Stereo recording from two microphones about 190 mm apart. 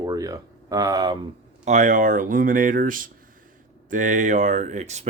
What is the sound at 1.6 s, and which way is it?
Speech, 40° right (ahead or behind).